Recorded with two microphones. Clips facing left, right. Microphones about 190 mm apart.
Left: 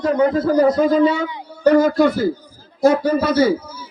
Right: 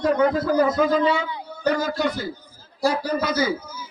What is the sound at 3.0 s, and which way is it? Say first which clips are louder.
Speech: left 7 dB; 30° left (ahead or behind).